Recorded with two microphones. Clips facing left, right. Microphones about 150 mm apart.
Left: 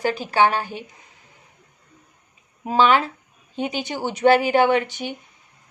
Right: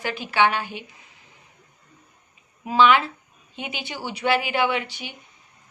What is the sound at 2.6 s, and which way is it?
A woman's voice, 40° left (ahead or behind).